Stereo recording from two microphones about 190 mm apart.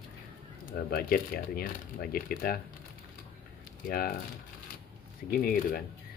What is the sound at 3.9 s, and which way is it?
Speech, 50° left (ahead or behind).